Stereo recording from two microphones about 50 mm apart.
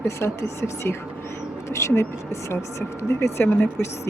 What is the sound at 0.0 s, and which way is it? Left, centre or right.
Speech, left.